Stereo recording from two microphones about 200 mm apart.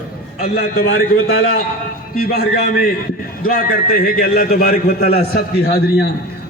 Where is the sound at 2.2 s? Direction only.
50° left (ahead or behind).